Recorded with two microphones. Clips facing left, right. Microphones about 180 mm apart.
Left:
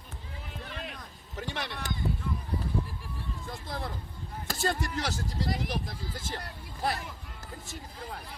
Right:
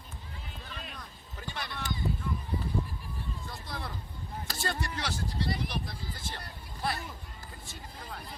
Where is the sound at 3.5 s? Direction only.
45° left (ahead or behind).